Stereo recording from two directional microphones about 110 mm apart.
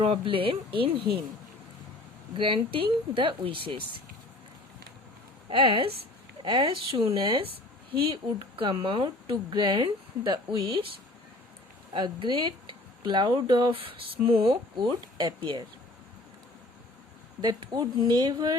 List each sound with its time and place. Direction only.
0.0 s speech: 55° right (ahead or behind)
2.3 s speech: 50° right (ahead or behind)
5.5 s speech: 50° right (ahead or behind)
11.9 s speech: 45° right (ahead or behind)
17.4 s speech: 40° right (ahead or behind)